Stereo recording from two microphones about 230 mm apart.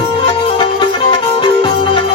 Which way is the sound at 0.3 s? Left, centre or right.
Left.